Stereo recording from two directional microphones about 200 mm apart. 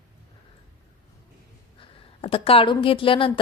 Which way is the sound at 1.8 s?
25° left (ahead or behind).